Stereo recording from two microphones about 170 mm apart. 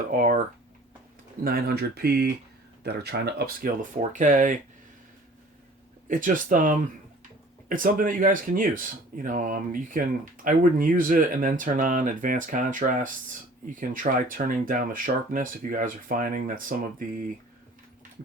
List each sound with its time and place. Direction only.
0.1 s speech: 50° right (ahead or behind)
1.5 s speech: 60° right (ahead or behind)
6.1 s speech: 50° right (ahead or behind)